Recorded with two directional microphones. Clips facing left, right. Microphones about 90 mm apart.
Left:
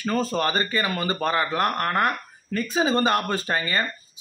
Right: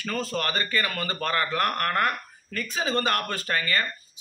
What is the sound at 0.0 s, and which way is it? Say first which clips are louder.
A man's voice: left 5 dB; 25° left (ahead or behind).